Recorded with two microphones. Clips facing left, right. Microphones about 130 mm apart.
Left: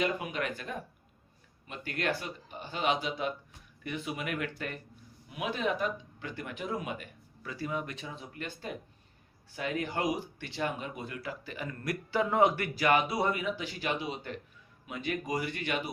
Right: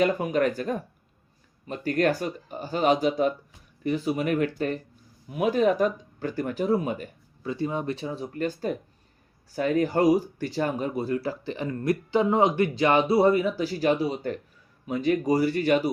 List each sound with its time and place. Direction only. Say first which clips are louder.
0.0 s speech: right 9 dB; 40° right (ahead or behind)
7.5 s speech: right 7 dB; 25° right (ahead or behind)